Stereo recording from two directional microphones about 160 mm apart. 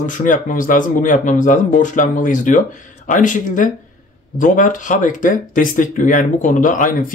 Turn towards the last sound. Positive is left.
turn(degrees=60)  # may be behind; listen again after turning